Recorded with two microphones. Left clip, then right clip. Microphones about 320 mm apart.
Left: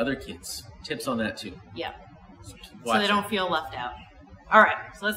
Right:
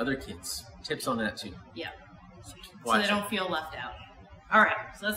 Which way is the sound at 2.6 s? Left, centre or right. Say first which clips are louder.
Left 2 dB; centre.